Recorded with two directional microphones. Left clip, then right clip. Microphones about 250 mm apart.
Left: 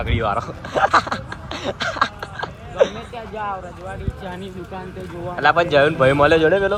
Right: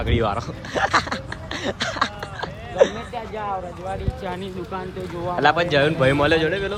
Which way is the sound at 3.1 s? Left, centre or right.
Right.